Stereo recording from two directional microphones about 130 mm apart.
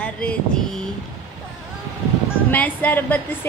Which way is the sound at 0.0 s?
10° left (ahead or behind).